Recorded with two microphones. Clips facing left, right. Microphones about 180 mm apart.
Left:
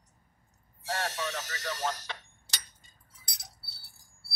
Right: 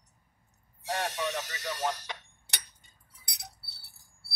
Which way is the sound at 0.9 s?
15° right (ahead or behind).